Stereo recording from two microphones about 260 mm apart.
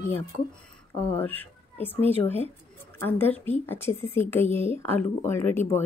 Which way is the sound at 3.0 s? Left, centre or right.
Centre.